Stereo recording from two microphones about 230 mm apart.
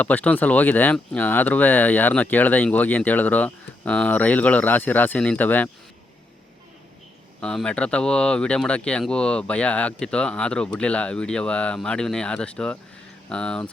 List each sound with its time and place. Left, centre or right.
0.0 s speech: centre
7.4 s speech: centre